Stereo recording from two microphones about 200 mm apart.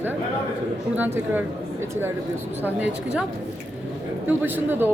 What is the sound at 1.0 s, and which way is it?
Speech, 10° right (ahead or behind).